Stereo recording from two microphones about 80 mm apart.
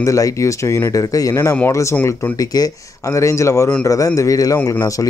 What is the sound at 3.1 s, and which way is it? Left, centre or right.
Speech, left.